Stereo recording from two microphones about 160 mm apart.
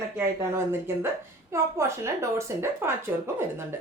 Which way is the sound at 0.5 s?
15° right (ahead or behind).